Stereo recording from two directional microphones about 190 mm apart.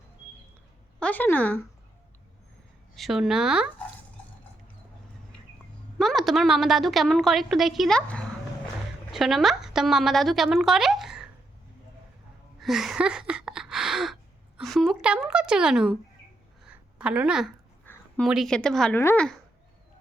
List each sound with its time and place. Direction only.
0.9 s a woman's voice: 5° left (ahead or behind)
2.9 s a woman's voice: centre (ahead or behind)
6.0 s a woman's voice: centre (ahead or behind)
12.5 s a sound: centre (ahead or behind)
14.6 s a woman's voice: centre (ahead or behind)
17.0 s a woman's voice: 5° right (ahead or behind)